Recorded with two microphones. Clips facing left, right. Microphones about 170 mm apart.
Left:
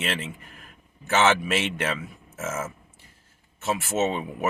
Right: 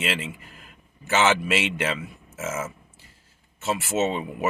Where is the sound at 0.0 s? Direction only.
5° right (ahead or behind).